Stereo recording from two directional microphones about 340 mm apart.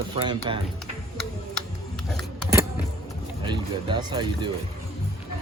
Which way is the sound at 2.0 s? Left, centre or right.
Centre.